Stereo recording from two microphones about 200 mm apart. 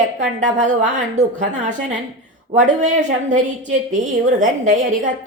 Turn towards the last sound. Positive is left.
turn(degrees=-40)  # may be behind; listen again after turning